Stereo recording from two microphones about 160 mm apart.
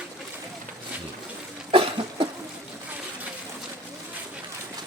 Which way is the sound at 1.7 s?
35° right (ahead or behind).